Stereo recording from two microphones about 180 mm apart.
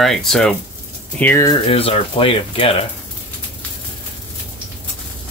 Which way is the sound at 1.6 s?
35° left (ahead or behind).